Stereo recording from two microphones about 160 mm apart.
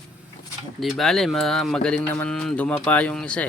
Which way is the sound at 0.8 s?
Centre (ahead or behind).